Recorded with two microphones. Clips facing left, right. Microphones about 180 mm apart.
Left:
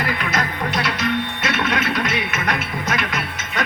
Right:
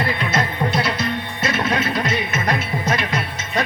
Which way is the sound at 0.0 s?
30° right (ahead or behind).